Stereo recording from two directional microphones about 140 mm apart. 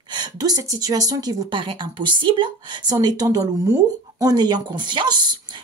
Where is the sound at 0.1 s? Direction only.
30° right (ahead or behind).